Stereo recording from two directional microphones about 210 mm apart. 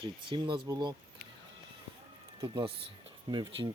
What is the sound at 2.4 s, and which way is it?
Speech, 25° right (ahead or behind).